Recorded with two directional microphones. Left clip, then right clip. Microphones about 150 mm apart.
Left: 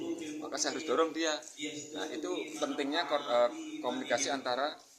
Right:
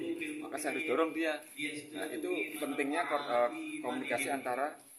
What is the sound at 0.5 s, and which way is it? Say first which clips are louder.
Speech: left 2 dB; 25° right (ahead or behind).